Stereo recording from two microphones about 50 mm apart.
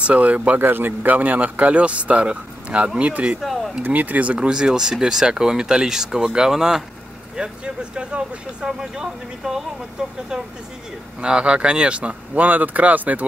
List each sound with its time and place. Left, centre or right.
0.0 s speech: right
0.6 s speech: right
3.4 s a sound: centre
3.8 s speech: right
4.4 s speech: centre
11.1 s speech: right